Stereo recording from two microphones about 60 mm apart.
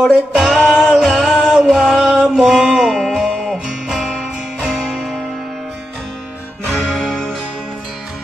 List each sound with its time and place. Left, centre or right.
0.0 s music: centre
0.6 s music: right
0.9 s music: centre
6.7 s music: centre